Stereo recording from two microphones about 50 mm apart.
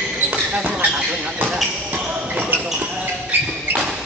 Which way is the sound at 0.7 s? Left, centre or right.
Right.